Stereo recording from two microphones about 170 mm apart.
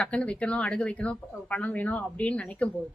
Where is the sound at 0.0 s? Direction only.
5° left (ahead or behind).